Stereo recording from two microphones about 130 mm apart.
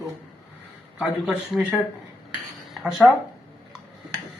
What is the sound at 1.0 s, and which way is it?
Speech, 5° right (ahead or behind).